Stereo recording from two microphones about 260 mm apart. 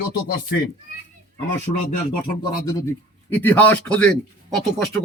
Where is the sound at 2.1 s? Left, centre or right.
Centre.